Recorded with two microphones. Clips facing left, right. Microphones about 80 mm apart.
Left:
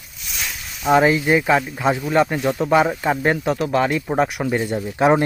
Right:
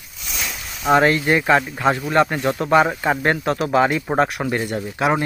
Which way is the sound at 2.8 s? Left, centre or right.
Centre.